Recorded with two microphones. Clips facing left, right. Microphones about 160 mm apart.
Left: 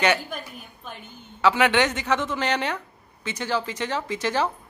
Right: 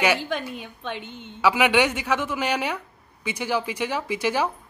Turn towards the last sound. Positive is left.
turn(degrees=-10)  # may be behind; listen again after turning